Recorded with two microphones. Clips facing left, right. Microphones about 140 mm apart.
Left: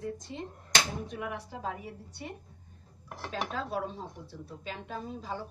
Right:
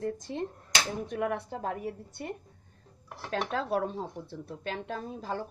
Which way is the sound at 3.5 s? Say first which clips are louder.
Right 5 dB; 55° right (ahead or behind).